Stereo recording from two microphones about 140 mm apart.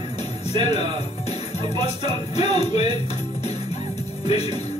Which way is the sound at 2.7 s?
30° right (ahead or behind).